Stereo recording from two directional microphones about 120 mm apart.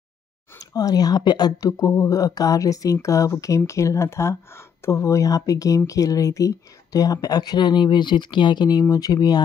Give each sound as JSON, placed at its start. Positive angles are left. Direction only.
{"t": 0.6, "sound": "speech", "side_deg": 30}